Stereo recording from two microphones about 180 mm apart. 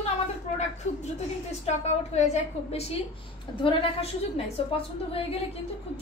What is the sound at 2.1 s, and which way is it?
Speech, 40° left (ahead or behind).